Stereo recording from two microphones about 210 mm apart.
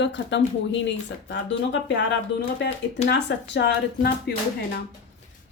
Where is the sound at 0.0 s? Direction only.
60° left (ahead or behind).